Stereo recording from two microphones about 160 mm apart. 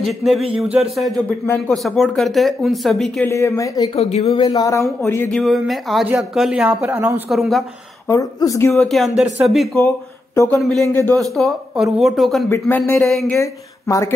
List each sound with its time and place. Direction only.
0.0 s speech: centre (ahead or behind)
3.3 s speech: 20° left (ahead or behind)
3.9 s speech: 40° left (ahead or behind)
4.4 s speech: 25° left (ahead or behind)
5.3 s speech: centre (ahead or behind)
7.2 s speech: centre (ahead or behind)
8.1 s speech: 20° left (ahead or behind)
8.7 s speech: centre (ahead or behind)
10.3 s speech: 20° left (ahead or behind)
10.6 s speech: centre (ahead or behind)
12.4 s speech: 15° left (ahead or behind)
13.0 s speech: centre (ahead or behind)
13.4 s speech: 20° left (ahead or behind)